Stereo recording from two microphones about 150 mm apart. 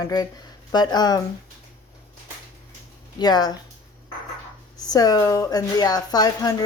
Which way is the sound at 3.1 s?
25° left (ahead or behind).